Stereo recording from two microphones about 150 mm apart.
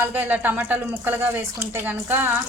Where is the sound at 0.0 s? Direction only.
10° right (ahead or behind).